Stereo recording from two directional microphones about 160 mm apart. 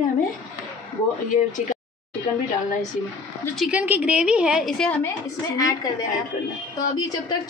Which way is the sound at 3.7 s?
10° right (ahead or behind).